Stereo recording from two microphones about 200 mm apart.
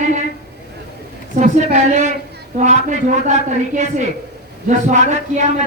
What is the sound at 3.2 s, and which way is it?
A man's voice, 35° right (ahead or behind).